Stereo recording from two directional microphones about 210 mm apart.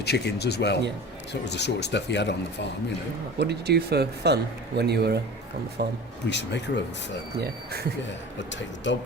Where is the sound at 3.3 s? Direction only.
50° right (ahead or behind).